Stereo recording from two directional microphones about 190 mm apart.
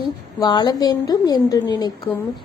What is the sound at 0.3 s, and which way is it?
A woman's voice, 20° left (ahead or behind).